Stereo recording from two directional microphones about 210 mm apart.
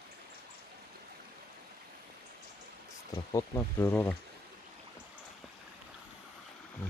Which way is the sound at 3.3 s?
10° left (ahead or behind).